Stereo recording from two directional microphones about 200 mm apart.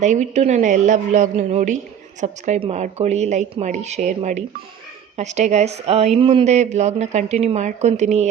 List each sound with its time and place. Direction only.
0.0 s a woman's voice: 35° right (ahead or behind)